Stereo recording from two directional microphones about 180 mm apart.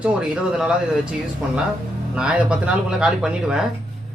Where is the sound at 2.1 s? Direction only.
5° right (ahead or behind).